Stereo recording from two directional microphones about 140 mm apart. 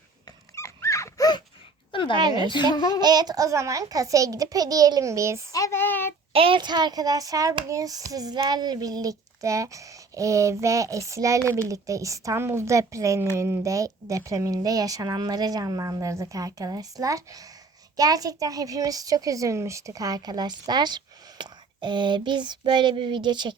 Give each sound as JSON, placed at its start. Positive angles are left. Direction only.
{"t": 0.5, "sound": "dog", "side_deg": 20}
{"t": 1.9, "sound": "a sound", "side_deg": 35}
{"t": 2.2, "sound": "a woman's voice", "side_deg": -30}
{"t": 2.7, "sound": "a child's voice", "side_deg": 30}
{"t": 3.0, "sound": "a child's voice", "side_deg": -30}
{"t": 5.5, "sound": "child singing", "side_deg": 25}
{"t": 6.3, "sound": "a child's voice", "side_deg": -40}